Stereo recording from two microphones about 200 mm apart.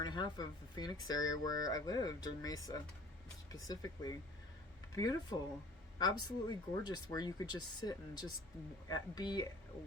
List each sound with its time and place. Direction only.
0.0 s speech: 20° left (ahead or behind)